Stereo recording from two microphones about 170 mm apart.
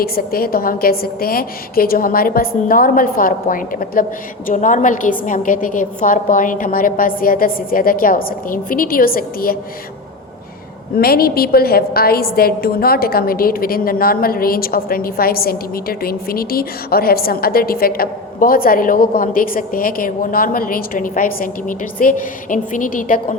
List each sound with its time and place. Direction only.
0.0 s a woman's voice: 60° left (ahead or behind)
10.9 s a woman's voice: 60° left (ahead or behind)